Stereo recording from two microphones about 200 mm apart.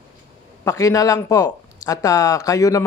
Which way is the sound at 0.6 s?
15° left (ahead or behind).